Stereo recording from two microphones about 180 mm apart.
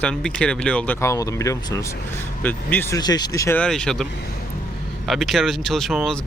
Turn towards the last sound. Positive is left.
turn(degrees=0)  # may be behind; listen again after turning